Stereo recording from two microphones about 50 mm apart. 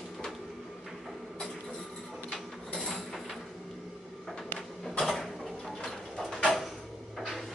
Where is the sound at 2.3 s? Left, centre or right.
Centre.